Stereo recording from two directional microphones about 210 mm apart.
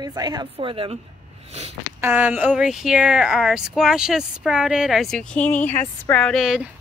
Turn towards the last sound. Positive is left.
turn(degrees=0)  # may be behind; listen again after turning